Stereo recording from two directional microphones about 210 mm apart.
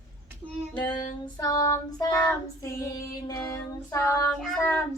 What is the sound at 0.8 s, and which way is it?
Child singing, 20° left (ahead or behind).